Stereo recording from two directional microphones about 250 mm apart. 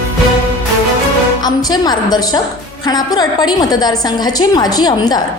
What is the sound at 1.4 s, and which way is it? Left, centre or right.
A woman's voice, centre.